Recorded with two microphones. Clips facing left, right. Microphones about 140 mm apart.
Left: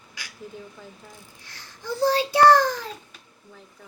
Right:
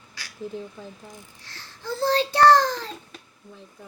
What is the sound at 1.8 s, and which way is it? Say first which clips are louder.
A child's voice: left 1 dB; 15° left (ahead or behind).